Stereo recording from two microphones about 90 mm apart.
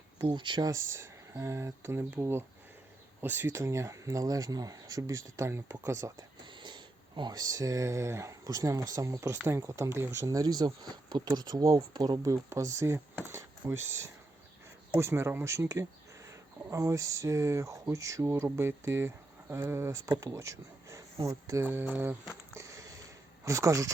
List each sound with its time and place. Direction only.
0.2 s speech: 55° right (ahead or behind)
0.7 s speech: 30° right (ahead or behind)
6.4 s speech: 60° right (ahead or behind)
12.3 s speech: 35° right (ahead or behind)
22.5 s sniff: 35° right (ahead or behind)
23.5 s speech: 35° right (ahead or behind)